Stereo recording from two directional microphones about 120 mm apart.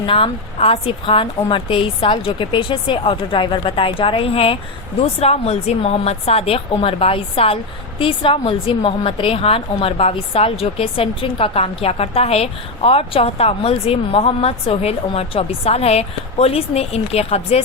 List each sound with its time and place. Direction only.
0.0 s speech: 50° left (ahead or behind)